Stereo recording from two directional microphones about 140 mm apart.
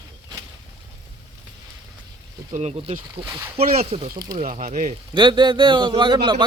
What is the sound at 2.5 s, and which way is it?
Speech, 50° right (ahead or behind).